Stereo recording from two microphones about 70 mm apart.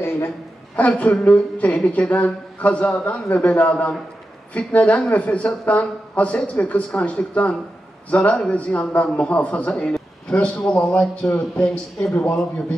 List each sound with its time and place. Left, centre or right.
0.7 s a man's voice: left